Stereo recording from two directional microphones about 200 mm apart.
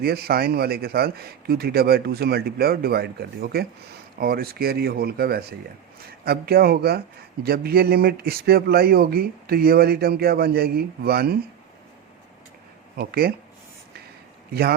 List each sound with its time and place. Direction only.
0.0 s a man's voice: 50° right (ahead or behind)
13.0 s a man's voice: 50° right (ahead or behind)